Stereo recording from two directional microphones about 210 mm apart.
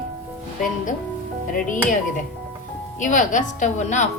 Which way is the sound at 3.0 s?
35° left (ahead or behind).